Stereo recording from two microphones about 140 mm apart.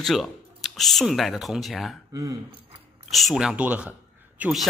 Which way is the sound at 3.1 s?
Centre (ahead or behind).